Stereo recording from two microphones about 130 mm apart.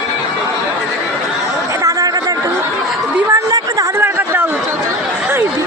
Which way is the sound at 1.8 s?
30° right (ahead or behind).